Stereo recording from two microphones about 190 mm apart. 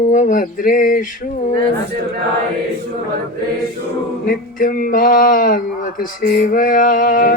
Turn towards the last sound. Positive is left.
turn(degrees=45)  # may be behind; listen again after turning